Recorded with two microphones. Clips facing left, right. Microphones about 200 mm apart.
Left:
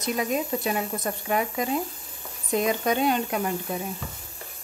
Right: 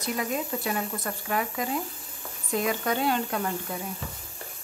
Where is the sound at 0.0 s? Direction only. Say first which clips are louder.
Left 3 dB; 20° left (ahead or behind).